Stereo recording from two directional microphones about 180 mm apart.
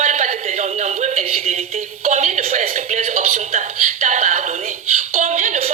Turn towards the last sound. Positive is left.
turn(degrees=-40)  # may be behind; listen again after turning